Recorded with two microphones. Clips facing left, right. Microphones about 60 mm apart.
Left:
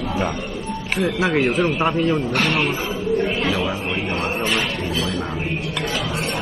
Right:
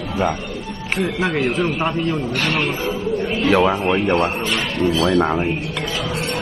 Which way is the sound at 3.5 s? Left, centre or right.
Right.